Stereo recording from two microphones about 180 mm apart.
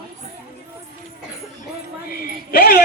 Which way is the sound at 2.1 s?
55° left (ahead or behind).